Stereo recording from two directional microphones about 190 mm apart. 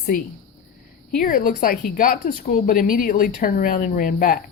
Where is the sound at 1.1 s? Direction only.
45° left (ahead or behind).